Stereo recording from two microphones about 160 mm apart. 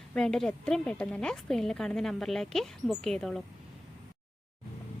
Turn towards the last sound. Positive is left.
turn(degrees=5)  # may be behind; listen again after turning